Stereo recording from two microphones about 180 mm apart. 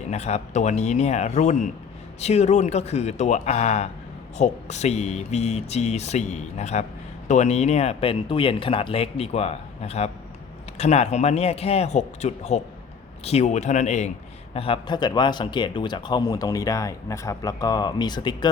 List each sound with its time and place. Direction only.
0.1 s speech: 40° left (ahead or behind)